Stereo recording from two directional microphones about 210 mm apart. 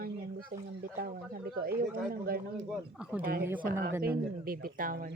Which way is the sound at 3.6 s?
45° right (ahead or behind).